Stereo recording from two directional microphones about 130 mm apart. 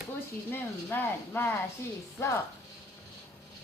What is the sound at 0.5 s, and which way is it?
Speech, 15° left (ahead or behind).